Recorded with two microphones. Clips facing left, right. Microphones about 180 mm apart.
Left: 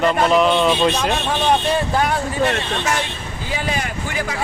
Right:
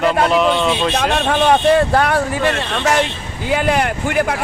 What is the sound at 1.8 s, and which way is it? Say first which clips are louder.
Speech: right 5 dB; 70° right (ahead or behind).